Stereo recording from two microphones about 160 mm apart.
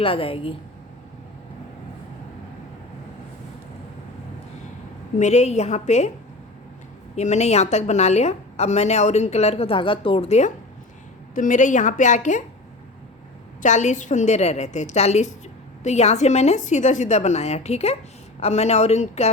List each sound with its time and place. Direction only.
0.0 s a woman's voice: 35° left (ahead or behind)
5.2 s a woman's voice: 45° left (ahead or behind)
7.2 s a woman's voice: 45° left (ahead or behind)
13.6 s a woman's voice: 50° left (ahead or behind)